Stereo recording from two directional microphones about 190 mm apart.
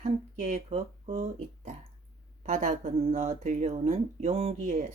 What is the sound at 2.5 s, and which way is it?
A woman's voice, 45° right (ahead or behind).